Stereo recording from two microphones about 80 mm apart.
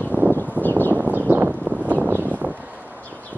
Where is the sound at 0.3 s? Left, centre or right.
Left.